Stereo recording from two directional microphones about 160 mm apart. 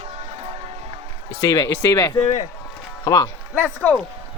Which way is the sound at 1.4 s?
25° left (ahead or behind).